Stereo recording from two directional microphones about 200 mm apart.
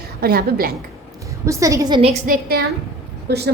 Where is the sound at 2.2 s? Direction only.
50° right (ahead or behind).